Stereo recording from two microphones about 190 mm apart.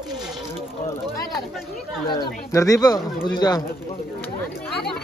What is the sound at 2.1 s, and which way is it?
Speech, 20° left (ahead or behind).